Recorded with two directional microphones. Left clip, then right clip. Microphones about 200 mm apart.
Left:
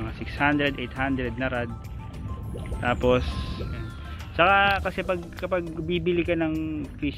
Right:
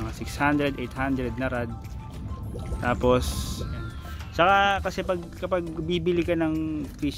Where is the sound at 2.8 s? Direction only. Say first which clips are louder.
Even; 15° right (ahead or behind).